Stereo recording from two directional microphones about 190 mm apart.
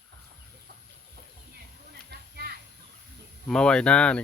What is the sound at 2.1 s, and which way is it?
Children playing, 55° right (ahead or behind).